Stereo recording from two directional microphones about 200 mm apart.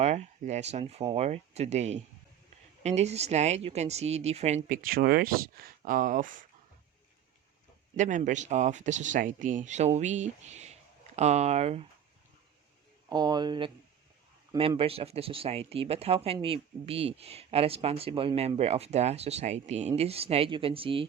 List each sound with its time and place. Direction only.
0.0 s speech: 35° right (ahead or behind)
7.9 s speech: 40° right (ahead or behind)
13.1 s speech: 20° right (ahead or behind)